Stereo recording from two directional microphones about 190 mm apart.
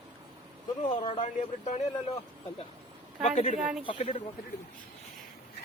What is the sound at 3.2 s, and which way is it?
Speech, 35° left (ahead or behind).